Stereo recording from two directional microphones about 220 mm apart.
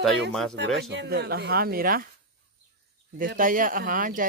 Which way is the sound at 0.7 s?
50° right (ahead or behind).